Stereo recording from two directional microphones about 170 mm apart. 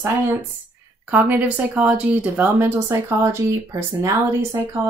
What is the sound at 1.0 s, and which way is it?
Speech, 10° right (ahead or behind).